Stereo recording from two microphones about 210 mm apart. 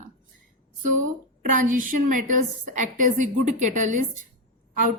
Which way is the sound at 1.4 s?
35° right (ahead or behind).